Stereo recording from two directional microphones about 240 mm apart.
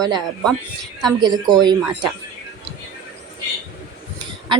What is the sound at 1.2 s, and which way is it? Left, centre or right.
Speech, centre.